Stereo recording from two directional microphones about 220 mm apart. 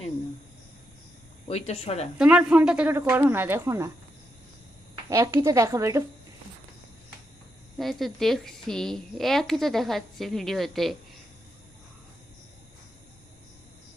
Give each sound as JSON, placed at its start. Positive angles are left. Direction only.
{"t": 1.5, "sound": "speech", "side_deg": 25}
{"t": 2.1, "sound": "speech", "side_deg": -5}
{"t": 5.0, "sound": "speech", "side_deg": -15}
{"t": 7.8, "sound": "a woman's voice", "side_deg": 0}